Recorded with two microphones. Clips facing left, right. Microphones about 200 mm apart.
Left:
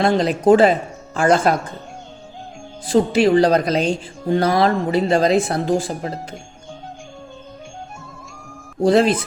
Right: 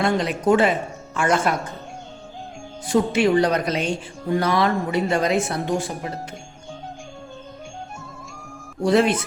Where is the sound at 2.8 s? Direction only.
30° left (ahead or behind).